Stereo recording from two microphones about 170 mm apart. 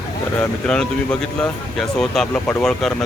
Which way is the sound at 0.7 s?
5° left (ahead or behind).